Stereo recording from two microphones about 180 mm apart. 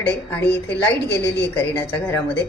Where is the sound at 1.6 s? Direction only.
10° left (ahead or behind).